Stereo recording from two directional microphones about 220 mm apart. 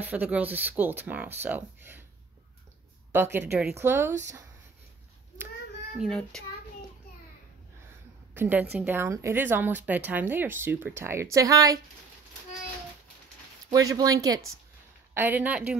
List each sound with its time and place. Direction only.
0.1 s speech: 5° right (ahead or behind)
3.1 s speech: 10° right (ahead or behind)
5.9 s a child's voice: centre (ahead or behind)
8.4 s speech: 10° right (ahead or behind)
13.7 s speech: 15° right (ahead or behind)